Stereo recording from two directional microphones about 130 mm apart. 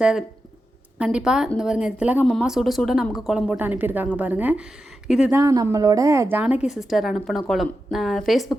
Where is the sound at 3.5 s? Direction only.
15° right (ahead or behind).